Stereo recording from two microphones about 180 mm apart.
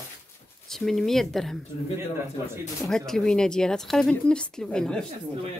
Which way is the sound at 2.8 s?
Centre (ahead or behind).